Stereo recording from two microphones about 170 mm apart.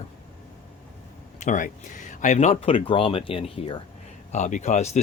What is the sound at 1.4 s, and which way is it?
Speech, 50° left (ahead or behind).